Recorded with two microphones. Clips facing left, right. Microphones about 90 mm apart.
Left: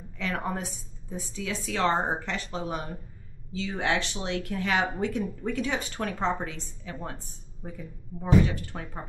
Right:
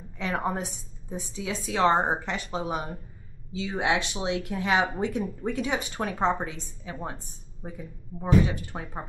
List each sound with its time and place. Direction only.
0.2 s speech: 20° right (ahead or behind)